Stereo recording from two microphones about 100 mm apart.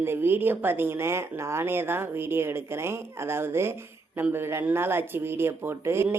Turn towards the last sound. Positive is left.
turn(degrees=-25)  # may be behind; listen again after turning